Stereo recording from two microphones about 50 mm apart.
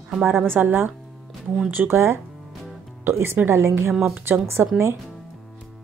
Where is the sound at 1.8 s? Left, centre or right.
Right.